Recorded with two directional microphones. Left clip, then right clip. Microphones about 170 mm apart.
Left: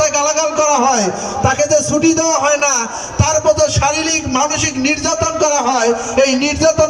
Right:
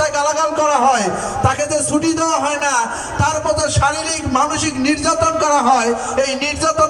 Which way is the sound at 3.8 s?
15° left (ahead or behind).